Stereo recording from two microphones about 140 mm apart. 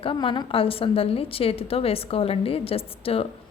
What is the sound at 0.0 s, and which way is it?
A woman's voice, 35° left (ahead or behind).